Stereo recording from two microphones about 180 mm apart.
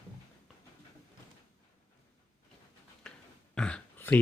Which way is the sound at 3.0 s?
5° left (ahead or behind).